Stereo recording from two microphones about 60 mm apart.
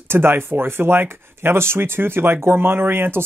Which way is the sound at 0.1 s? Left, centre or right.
Right.